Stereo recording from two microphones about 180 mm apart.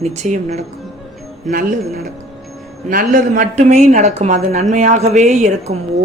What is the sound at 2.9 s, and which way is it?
A woman's voice, 50° right (ahead or behind).